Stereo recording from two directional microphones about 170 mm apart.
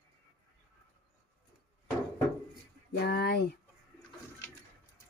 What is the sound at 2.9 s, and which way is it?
Speech, 70° left (ahead or behind).